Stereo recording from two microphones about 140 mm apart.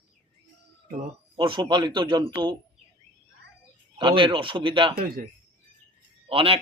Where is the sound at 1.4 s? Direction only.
35° right (ahead or behind).